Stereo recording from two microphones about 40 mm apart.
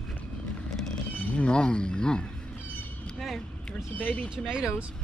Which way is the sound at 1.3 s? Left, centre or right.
Left.